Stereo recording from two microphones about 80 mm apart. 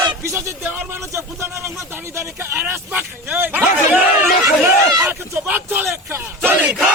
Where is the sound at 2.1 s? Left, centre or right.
Right.